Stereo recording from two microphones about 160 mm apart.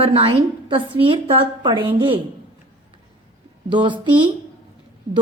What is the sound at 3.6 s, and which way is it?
Speech, 30° right (ahead or behind).